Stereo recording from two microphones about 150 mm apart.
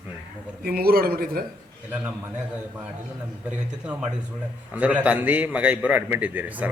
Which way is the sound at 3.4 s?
10° right (ahead or behind).